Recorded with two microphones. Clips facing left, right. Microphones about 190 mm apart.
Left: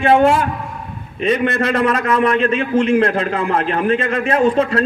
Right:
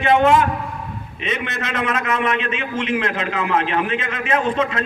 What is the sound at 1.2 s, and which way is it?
A man's voice, 35° left (ahead or behind).